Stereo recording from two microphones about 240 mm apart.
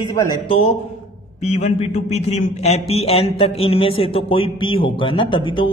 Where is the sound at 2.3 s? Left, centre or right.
Left.